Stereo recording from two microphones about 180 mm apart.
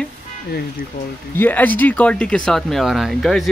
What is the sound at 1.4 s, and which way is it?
Speech, 10° left (ahead or behind).